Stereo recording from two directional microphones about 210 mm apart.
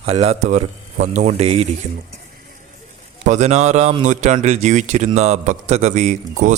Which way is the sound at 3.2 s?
35° right (ahead or behind).